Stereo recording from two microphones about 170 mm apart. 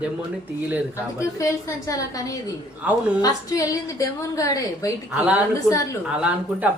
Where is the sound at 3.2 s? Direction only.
20° left (ahead or behind).